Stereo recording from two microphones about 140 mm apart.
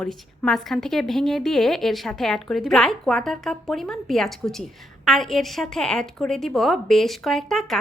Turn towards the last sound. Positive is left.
turn(degrees=0)  # may be behind; listen again after turning